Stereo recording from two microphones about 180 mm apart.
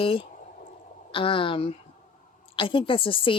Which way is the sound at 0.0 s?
30° left (ahead or behind).